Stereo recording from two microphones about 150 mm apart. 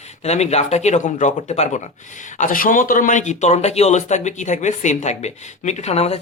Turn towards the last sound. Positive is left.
turn(degrees=45)  # may be behind; listen again after turning